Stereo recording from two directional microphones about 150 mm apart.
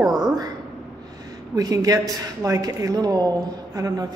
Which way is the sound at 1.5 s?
25° right (ahead or behind).